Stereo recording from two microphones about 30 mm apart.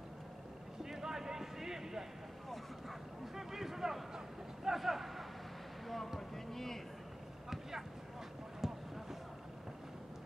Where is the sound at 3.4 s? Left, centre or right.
Centre.